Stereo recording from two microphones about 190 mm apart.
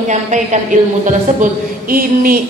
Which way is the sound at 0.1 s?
40° right (ahead or behind).